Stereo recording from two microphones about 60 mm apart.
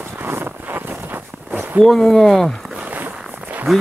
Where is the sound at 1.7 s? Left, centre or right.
Centre.